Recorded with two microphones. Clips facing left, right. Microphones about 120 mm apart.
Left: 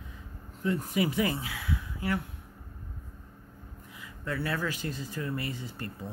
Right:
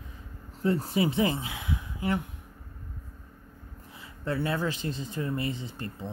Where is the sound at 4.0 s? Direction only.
25° right (ahead or behind).